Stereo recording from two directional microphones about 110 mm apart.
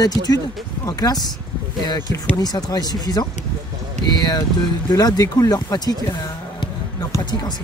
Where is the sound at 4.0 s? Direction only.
90° right.